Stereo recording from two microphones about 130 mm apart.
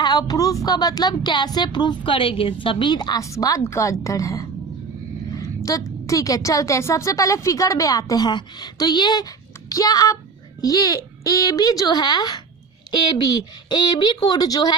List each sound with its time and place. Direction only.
0.0 s speech: 30° left (ahead or behind)
5.3 s a sound: 25° left (ahead or behind)
6.1 s a woman's voice: 25° left (ahead or behind)